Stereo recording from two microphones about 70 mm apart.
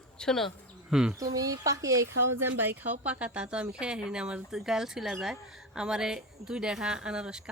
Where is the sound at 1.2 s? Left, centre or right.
Right.